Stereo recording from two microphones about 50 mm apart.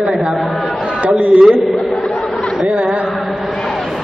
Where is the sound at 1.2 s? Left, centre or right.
Right.